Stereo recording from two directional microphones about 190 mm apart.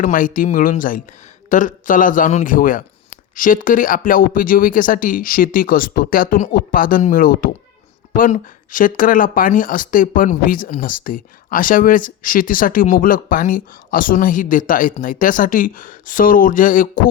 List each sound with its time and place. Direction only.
0.0 s speech: 45° left (ahead or behind)